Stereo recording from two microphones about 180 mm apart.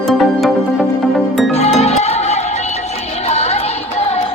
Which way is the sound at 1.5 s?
35° left (ahead or behind).